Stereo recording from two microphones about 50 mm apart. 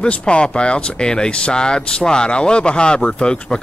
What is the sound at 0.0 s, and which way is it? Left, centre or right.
Speech, centre.